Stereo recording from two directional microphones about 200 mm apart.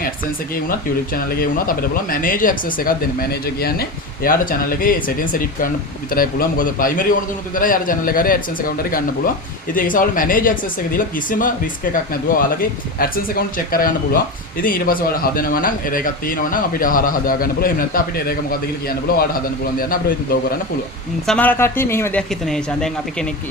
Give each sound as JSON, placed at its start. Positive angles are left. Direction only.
{"t": 0.7, "sound": "speech", "side_deg": 45}
{"t": 13.0, "sound": "speech", "side_deg": 45}
{"t": 21.2, "sound": "speech", "side_deg": 10}